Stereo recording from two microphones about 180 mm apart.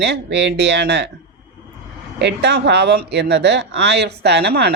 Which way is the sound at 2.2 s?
70° right (ahead or behind).